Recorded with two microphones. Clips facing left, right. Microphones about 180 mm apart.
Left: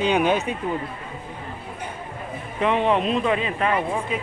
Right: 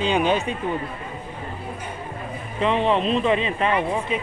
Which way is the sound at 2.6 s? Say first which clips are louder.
Even; 10° left (ahead or behind).